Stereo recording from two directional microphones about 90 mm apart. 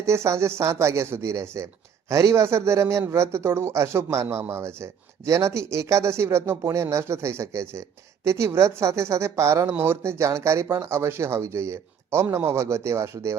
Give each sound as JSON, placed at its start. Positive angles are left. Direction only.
{"t": 0.0, "sound": "speech", "side_deg": -30}